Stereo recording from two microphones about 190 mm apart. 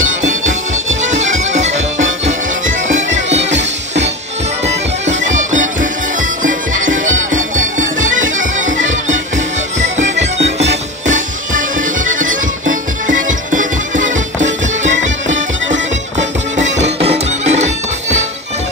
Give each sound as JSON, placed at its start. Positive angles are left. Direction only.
{"t": 0.2, "sound": "music", "side_deg": -40}
{"t": 3.5, "sound": "music", "side_deg": -70}
{"t": 4.6, "sound": "bagpipes", "side_deg": -40}
{"t": 5.3, "sound": "music", "side_deg": -40}
{"t": 10.0, "sound": "music", "side_deg": -70}
{"t": 10.3, "sound": "music", "side_deg": -35}